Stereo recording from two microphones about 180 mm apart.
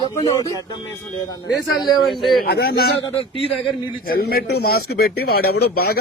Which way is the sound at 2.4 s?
60° left (ahead or behind).